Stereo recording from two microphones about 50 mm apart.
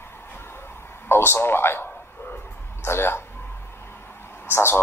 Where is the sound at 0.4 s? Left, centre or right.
Left.